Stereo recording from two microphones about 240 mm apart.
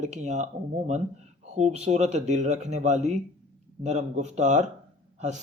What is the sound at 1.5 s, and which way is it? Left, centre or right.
A man's voice, right.